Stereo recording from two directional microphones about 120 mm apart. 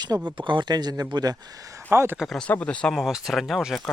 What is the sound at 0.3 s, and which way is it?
Speech, 40° right (ahead or behind).